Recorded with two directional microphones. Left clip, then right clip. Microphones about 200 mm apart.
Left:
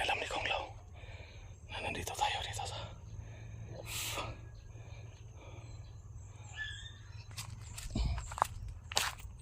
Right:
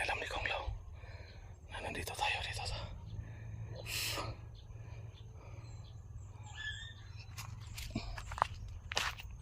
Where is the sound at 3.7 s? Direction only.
5° left (ahead or behind).